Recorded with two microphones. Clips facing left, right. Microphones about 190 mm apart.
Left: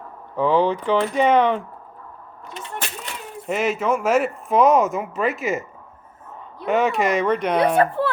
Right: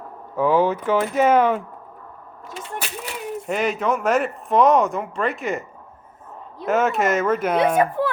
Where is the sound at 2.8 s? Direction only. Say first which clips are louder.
Right 3 dB; 5° right (ahead or behind).